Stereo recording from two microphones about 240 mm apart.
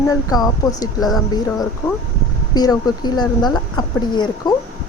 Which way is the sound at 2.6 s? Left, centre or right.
Centre.